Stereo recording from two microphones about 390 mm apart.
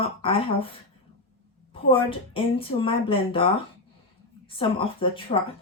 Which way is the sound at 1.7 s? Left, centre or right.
Centre.